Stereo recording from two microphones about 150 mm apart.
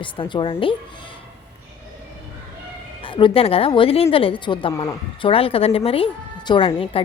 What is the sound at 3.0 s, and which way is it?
Speech, 35° left (ahead or behind).